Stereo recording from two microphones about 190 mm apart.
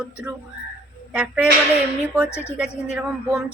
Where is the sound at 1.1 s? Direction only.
5° right (ahead or behind).